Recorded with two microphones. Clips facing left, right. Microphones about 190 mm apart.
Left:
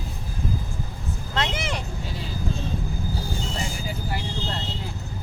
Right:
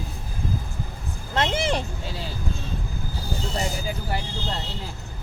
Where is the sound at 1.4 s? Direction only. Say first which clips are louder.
Right 5 dB; 30° right (ahead or behind).